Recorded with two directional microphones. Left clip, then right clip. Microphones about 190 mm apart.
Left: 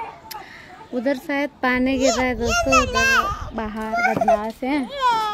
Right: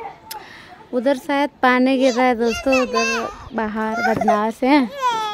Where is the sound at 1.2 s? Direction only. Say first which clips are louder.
Right 5 dB; 40° right (ahead or behind).